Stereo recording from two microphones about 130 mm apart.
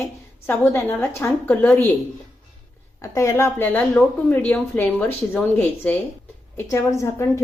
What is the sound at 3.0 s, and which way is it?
Speech, 25° left (ahead or behind).